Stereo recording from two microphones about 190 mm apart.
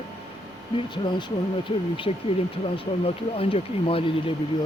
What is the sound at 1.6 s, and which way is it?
Speech, 25° left (ahead or behind).